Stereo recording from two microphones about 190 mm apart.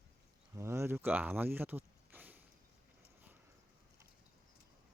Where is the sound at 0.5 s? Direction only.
15° right (ahead or behind).